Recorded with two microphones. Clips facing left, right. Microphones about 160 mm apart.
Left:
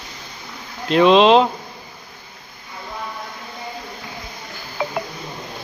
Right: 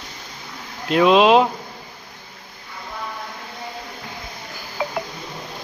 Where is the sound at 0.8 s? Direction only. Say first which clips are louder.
Left 2 dB; 5° right (ahead or behind).